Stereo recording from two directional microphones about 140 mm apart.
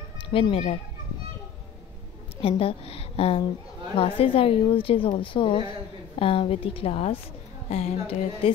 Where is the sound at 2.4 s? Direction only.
40° left (ahead or behind).